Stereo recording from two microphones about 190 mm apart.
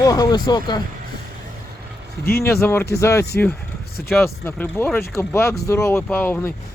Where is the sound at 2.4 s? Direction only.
10° left (ahead or behind).